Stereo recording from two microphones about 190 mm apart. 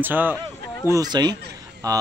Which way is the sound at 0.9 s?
20° right (ahead or behind).